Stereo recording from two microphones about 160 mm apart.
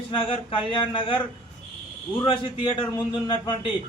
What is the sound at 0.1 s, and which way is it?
A man's voice, 35° left (ahead or behind).